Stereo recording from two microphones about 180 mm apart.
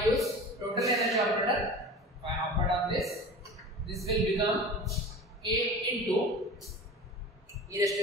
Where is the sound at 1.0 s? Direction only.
Centre (ahead or behind).